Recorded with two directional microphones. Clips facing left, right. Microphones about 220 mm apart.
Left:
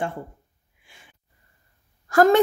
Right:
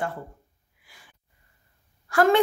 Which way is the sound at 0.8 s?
25° left (ahead or behind).